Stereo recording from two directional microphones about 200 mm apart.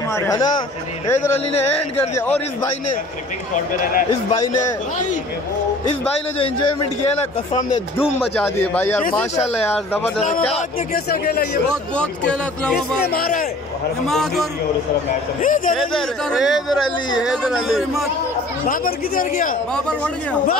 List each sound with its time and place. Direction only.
0.1 s a man's voice: 15° left (ahead or behind)
2.1 s a man's voice: 10° left (ahead or behind)
3.5 s speech: 40° left (ahead or behind)
8.2 s a man's voice: 10° left (ahead or behind)
10.2 s speech: 35° left (ahead or behind)
11.1 s a man's voice: 50° left (ahead or behind)
11.6 s speech: 5° left (ahead or behind)
13.0 s a man's voice: 50° left (ahead or behind)
14.0 s speech: centre (ahead or behind)
15.4 s a man's voice: 40° left (ahead or behind)
15.7 s speech: centre (ahead or behind)
18.7 s a man's voice: 45° left (ahead or behind)
19.7 s speech: 5° left (ahead or behind)